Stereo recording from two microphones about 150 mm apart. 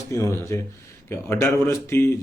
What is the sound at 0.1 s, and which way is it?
A man's voice, 20° left (ahead or behind).